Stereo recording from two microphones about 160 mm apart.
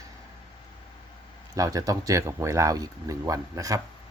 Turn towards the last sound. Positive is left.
turn(degrees=-20)  # may be behind; listen again after turning